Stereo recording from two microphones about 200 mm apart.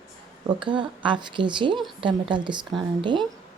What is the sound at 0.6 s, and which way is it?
A woman's voice, 25° right (ahead or behind).